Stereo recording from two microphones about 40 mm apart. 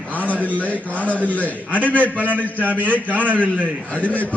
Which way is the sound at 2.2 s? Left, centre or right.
Right.